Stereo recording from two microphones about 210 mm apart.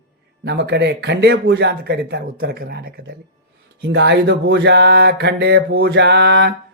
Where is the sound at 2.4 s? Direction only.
45° right (ahead or behind).